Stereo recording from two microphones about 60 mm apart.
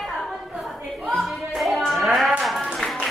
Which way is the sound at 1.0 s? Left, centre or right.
Centre.